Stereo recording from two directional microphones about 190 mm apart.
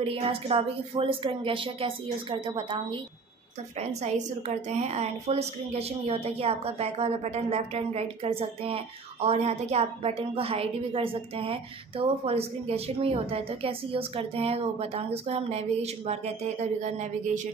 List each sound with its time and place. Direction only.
0.0 s speech: 30° right (ahead or behind)
4.6 s a woman's voice: 35° right (ahead or behind)